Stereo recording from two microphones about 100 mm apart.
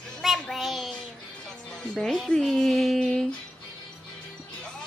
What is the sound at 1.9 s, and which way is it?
Speech, centre (ahead or behind).